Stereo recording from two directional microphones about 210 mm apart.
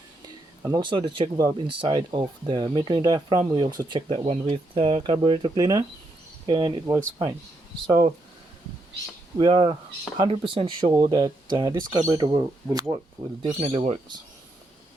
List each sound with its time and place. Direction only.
0.6 s speech: 20° right (ahead or behind)
9.4 s speech: 20° right (ahead or behind)
13.6 s speech: 30° right (ahead or behind)